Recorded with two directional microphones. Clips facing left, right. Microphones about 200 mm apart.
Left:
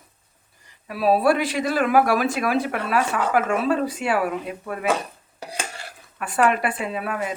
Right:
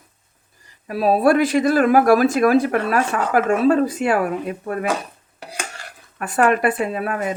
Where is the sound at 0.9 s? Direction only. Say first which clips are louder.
Right 3 dB; 45° right (ahead or behind).